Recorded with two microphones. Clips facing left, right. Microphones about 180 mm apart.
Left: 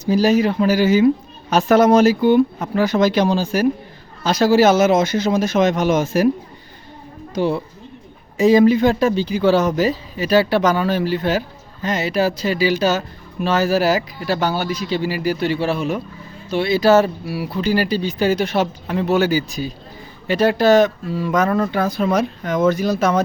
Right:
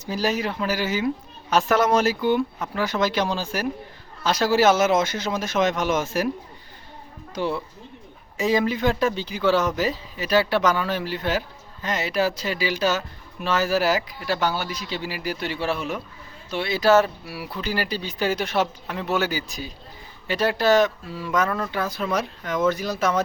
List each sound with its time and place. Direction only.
0.2 s speech: 40° left (ahead or behind)
3.1 s speech: 15° left (ahead or behind)
4.2 s speech: 40° left (ahead or behind)
7.3 s speech: 40° left (ahead or behind)
20.4 s speech: 50° left (ahead or behind)